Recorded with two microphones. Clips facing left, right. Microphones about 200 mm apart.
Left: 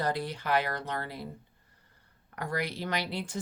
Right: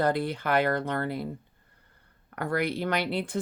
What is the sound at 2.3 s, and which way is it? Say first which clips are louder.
Speech: right 6 dB; 55° right (ahead or behind).